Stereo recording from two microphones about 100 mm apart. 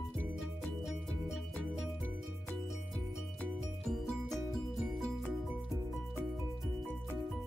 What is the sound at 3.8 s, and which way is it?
Music, 5° left (ahead or behind).